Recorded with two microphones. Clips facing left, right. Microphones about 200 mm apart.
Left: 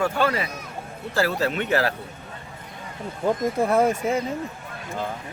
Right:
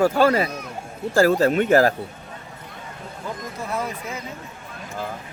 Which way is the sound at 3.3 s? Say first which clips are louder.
Left 10 dB; 50° left (ahead or behind).